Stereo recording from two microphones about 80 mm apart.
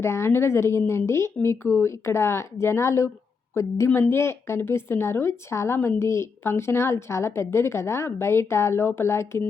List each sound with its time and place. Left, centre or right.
0.0 s a woman's voice: left